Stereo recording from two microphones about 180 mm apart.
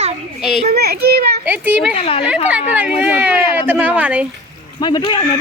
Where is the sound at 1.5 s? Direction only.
10° right (ahead or behind).